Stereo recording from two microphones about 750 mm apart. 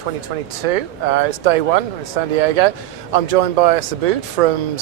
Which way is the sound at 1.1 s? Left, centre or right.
Right.